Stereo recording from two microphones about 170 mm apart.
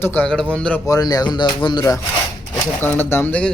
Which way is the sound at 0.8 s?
20° left (ahead or behind).